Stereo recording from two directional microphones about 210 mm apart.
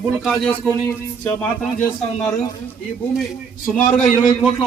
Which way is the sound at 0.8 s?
10° left (ahead or behind).